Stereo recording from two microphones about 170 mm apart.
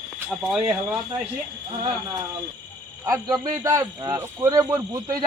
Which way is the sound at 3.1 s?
20° right (ahead or behind).